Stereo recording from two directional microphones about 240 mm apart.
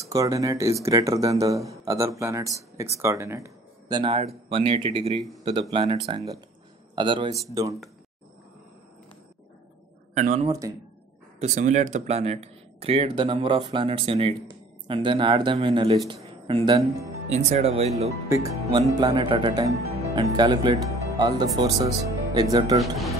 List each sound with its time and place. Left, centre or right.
0.0 s speech: centre
10.1 s speech: right
18.3 s speech: centre